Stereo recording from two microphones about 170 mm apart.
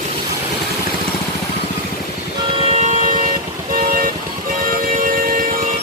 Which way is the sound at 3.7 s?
55° right (ahead or behind).